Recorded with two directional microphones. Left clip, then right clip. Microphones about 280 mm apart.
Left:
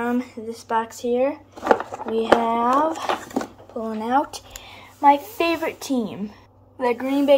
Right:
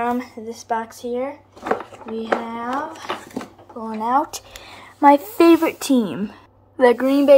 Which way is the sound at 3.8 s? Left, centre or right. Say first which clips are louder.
Left 2 dB; centre.